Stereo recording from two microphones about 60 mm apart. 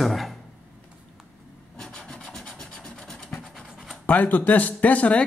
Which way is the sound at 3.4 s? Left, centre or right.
Centre.